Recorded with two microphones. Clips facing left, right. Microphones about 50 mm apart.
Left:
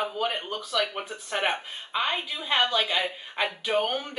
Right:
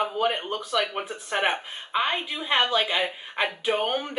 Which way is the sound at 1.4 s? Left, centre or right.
Centre.